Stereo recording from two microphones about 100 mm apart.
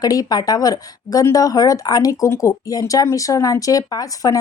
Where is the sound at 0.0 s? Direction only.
40° left (ahead or behind).